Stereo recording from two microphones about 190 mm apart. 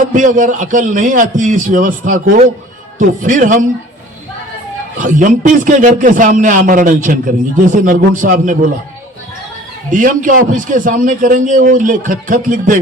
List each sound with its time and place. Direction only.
0.1 s a man's voice: 45° right (ahead or behind)
4.9 s a man's voice: 45° right (ahead or behind)
9.9 s a man's voice: 45° right (ahead or behind)